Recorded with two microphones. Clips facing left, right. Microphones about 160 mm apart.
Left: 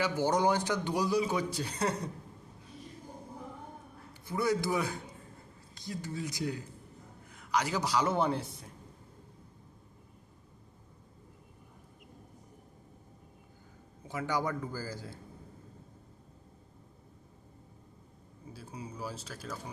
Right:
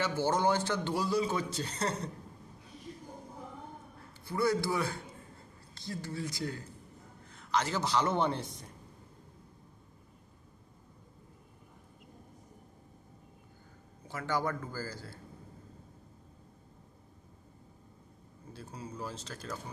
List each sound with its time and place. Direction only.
0.0 s a man's voice: 15° left (ahead or behind)
4.3 s a man's voice: 20° left (ahead or behind)
14.1 s a man's voice: 15° left (ahead or behind)
18.5 s a man's voice: 10° left (ahead or behind)